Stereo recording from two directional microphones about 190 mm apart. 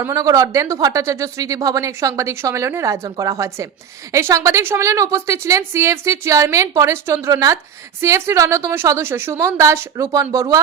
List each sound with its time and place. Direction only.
0.0 s speech: 15° right (ahead or behind)